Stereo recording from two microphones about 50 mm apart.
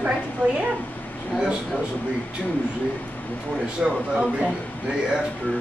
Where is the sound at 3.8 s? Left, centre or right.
Centre.